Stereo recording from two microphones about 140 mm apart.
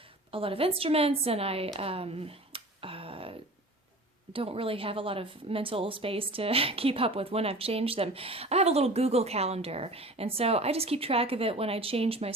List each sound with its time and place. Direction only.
0.3 s a woman's voice: 40° right (ahead or behind)